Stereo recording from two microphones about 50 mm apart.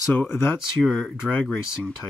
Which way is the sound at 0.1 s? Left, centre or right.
Left.